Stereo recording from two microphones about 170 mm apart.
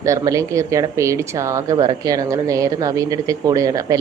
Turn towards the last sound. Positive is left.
turn(degrees=-20)  # may be behind; listen again after turning